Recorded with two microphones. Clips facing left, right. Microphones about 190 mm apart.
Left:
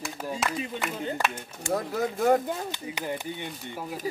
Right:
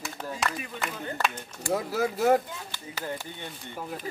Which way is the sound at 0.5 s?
25° left (ahead or behind).